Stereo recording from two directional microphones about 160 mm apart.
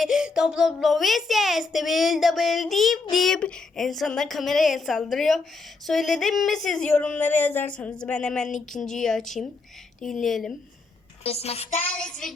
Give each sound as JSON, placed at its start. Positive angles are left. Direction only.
{"t": 0.0, "sound": "a woman's voice", "side_deg": -5}
{"t": 11.2, "sound": "a woman's voice", "side_deg": 40}
{"t": 11.8, "sound": "a woman's voice", "side_deg": 10}